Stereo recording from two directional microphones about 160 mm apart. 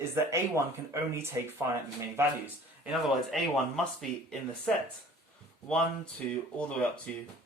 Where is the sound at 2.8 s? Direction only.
Centre (ahead or behind).